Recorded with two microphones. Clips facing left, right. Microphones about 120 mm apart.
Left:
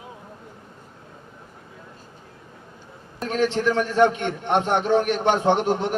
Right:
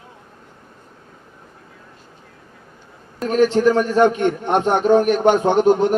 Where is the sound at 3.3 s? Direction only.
40° right (ahead or behind).